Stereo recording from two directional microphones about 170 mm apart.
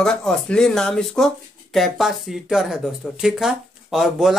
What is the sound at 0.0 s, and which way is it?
Speech, 5° left (ahead or behind).